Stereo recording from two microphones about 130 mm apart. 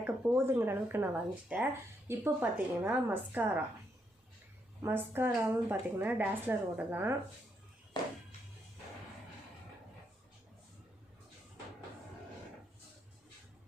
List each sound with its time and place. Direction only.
0.0 s a woman's voice: 15° right (ahead or behind)
4.8 s a woman's voice: 15° right (ahead or behind)